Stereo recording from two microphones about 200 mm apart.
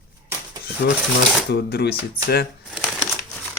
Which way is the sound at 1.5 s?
55° left (ahead or behind).